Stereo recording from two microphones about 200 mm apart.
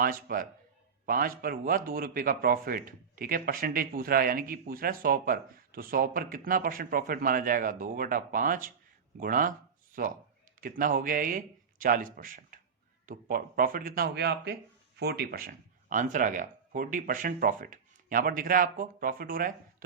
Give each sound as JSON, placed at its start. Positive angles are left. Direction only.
{"t": 0.0, "sound": "speech", "side_deg": -45}